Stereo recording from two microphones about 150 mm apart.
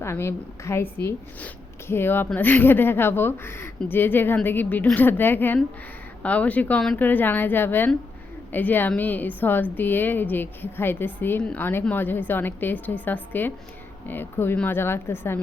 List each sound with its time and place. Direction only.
0.0 s a woman's voice: 15° left (ahead or behind)